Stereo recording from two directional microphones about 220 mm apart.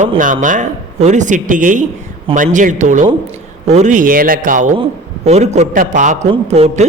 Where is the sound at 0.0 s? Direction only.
35° right (ahead or behind).